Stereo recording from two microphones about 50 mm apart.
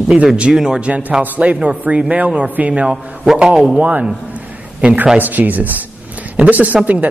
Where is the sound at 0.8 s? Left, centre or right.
Right.